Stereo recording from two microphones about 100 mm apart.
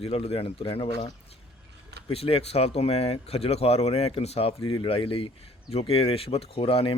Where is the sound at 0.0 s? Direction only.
80° left.